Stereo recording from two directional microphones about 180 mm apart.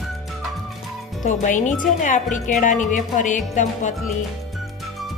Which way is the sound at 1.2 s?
45° left (ahead or behind).